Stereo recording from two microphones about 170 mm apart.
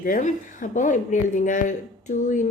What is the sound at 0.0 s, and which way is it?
Speech, 50° left (ahead or behind).